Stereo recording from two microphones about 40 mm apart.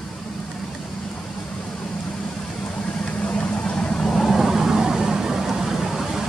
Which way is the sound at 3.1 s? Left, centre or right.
Left.